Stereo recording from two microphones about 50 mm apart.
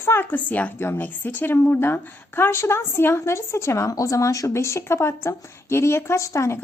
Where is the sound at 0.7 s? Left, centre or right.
Left.